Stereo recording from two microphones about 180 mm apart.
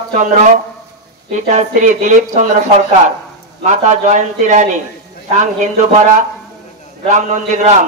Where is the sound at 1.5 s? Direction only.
40° right (ahead or behind).